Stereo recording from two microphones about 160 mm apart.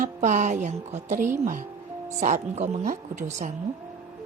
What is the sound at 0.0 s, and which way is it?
Speech, 50° right (ahead or behind).